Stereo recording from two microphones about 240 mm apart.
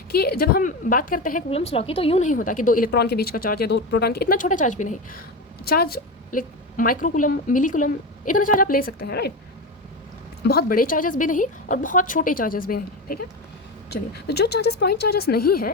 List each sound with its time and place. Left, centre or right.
0.1 s a woman's voice: left
10.4 s a woman's voice: left